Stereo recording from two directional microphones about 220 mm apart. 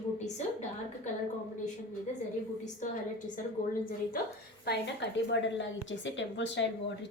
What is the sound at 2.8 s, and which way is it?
Speech, 35° left (ahead or behind).